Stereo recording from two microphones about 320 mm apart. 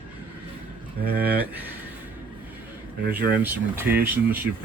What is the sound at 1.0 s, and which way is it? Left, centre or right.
Speech, right.